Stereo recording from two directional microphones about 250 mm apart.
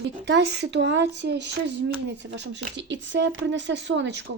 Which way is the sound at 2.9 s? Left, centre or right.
Right.